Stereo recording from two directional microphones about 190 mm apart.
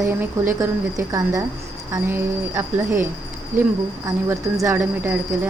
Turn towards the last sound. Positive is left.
turn(degrees=-10)  # may be behind; listen again after turning